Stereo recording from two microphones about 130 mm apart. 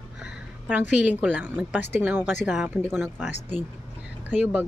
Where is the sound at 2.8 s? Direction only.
15° right (ahead or behind).